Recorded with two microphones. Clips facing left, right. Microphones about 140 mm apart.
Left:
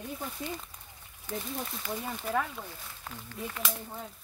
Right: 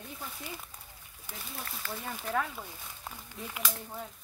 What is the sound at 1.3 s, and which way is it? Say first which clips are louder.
Speech: left 10 dB; 10° right (ahead or behind).